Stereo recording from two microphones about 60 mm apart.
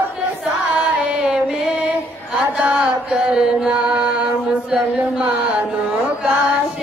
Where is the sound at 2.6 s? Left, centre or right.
Centre.